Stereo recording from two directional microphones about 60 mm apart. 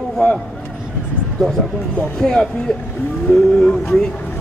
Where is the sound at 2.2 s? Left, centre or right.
Centre.